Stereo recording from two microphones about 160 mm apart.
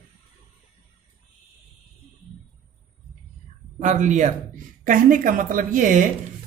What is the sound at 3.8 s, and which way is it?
A woman's voice, 50° right (ahead or behind).